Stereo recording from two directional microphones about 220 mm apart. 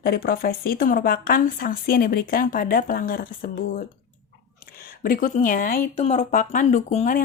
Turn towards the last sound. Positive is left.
turn(degrees=35)  # may be behind; listen again after turning